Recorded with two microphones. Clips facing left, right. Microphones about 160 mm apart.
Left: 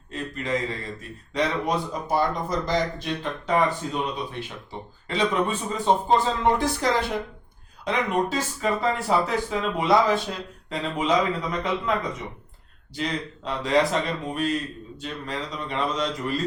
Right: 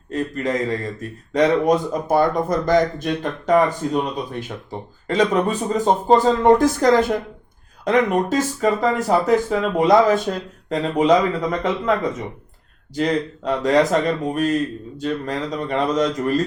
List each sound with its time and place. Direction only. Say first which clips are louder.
0.1 s speech: right 6 dB; 45° right (ahead or behind)
12.9 s speech: right 9 dB; 45° right (ahead or behind)